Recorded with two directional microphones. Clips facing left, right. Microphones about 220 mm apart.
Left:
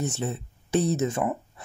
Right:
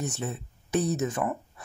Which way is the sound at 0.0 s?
25° left (ahead or behind).